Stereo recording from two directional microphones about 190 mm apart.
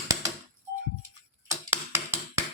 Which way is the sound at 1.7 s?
15° right (ahead or behind).